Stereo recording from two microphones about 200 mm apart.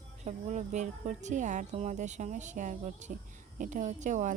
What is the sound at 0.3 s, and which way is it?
Speech, 35° right (ahead or behind).